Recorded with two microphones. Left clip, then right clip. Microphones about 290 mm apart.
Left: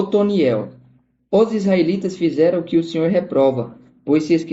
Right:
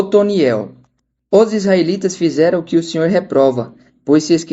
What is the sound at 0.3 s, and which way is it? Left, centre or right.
Speech, right.